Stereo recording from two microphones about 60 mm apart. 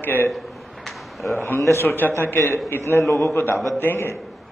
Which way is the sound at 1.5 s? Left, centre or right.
Left.